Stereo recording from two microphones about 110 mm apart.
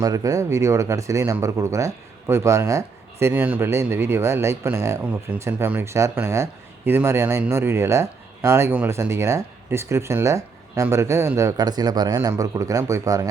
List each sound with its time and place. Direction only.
0.0 s speech: 30° right (ahead or behind)
5.0 s speech: 10° right (ahead or behind)
8.7 s speech: 15° right (ahead or behind)
9.0 s speech: 25° right (ahead or behind)